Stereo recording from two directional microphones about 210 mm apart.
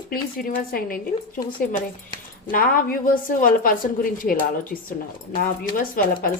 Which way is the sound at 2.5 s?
45° left (ahead or behind).